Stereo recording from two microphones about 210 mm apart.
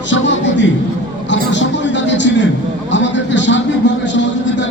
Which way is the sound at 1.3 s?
60° left (ahead or behind).